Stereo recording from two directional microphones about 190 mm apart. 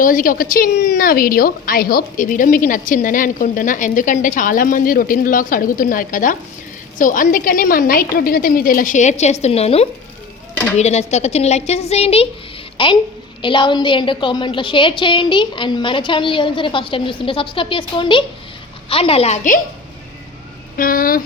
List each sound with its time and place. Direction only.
0.0 s a woman's voice: 45° left (ahead or behind)
20.7 s a woman's voice: 50° left (ahead or behind)